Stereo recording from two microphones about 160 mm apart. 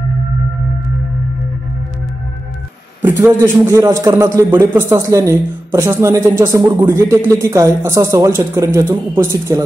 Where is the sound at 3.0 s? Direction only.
15° right (ahead or behind).